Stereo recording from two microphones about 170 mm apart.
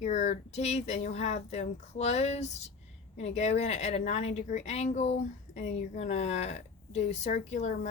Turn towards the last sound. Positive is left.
turn(degrees=45)  # may be behind; listen again after turning